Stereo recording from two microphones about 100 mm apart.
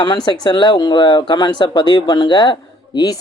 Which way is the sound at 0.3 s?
45° left (ahead or behind).